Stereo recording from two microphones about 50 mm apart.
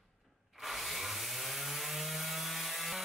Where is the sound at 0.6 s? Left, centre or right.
Centre.